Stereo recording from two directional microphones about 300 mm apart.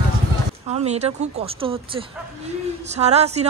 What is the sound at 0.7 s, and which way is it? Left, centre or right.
A woman's voice, right.